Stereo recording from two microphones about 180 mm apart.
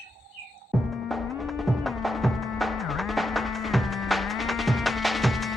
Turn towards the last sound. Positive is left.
turn(degrees=0)  # may be behind; listen again after turning